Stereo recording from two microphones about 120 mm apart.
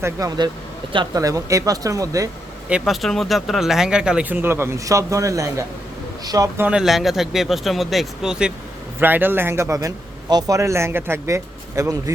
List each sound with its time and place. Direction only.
0.0 s speech: 30° right (ahead or behind)
2.6 s speech: 5° right (ahead or behind); by 6.5 s 30° right (ahead or behind)
6.6 s speech: 10° right (ahead or behind); by 12.1 s 25° right (ahead or behind)